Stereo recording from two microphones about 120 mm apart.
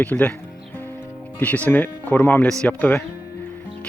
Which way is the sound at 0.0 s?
15° left (ahead or behind).